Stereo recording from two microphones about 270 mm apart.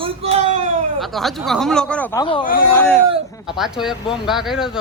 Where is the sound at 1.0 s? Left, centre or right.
Centre.